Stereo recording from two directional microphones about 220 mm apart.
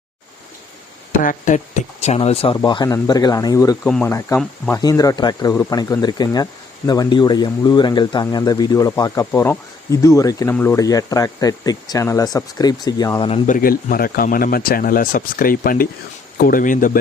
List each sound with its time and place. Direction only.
1.2 s speech: 35° left (ahead or behind); by 13.4 s 20° left (ahead or behind)
13.5 s speech: 40° left (ahead or behind)